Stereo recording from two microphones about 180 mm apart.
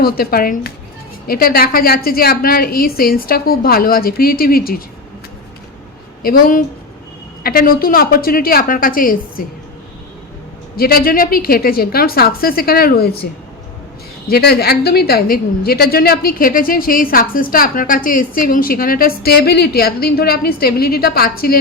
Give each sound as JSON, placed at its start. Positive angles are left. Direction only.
{"t": 0.0, "sound": "a woman's voice", "side_deg": 55}
{"t": 6.2, "sound": "a woman's voice", "side_deg": 50}
{"t": 10.8, "sound": "a woman's voice", "side_deg": 55}
{"t": 14.3, "sound": "a woman's voice", "side_deg": 60}